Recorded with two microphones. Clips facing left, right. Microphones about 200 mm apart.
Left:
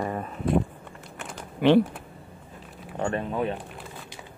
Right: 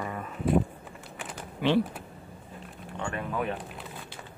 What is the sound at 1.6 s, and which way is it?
Speech, 55° left (ahead or behind).